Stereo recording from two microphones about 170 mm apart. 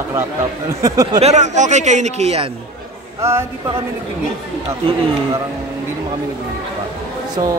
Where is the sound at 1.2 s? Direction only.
40° right (ahead or behind).